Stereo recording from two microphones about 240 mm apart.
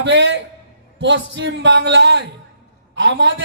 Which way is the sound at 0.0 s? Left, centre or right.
Right.